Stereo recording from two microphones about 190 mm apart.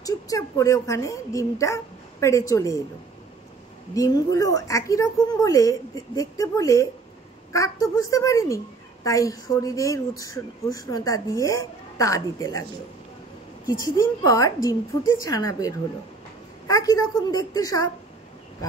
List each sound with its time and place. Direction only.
0.0 s speech: 15° left (ahead or behind)
3.9 s speech: 20° left (ahead or behind)
13.7 s a woman's voice: 15° left (ahead or behind)